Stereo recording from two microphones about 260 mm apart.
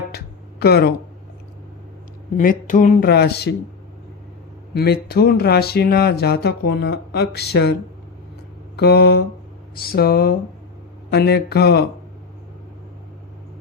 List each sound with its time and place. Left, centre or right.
0.1 s music: left
2.4 s speech: left
4.7 s speech: left